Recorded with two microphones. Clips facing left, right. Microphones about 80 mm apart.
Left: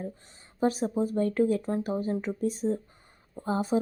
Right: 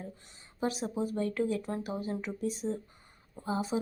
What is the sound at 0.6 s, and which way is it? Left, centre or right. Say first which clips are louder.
Speech: left 6 dB; left.